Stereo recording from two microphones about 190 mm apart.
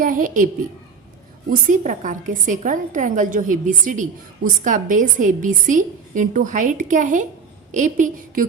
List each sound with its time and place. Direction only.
0.0 s a woman's voice: 45° right (ahead or behind)
1.5 s a woman's voice: 40° right (ahead or behind)